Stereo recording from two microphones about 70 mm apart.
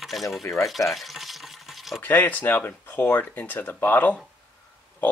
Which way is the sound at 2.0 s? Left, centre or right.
Left.